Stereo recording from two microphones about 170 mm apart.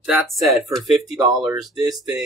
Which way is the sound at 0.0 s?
Centre (ahead or behind).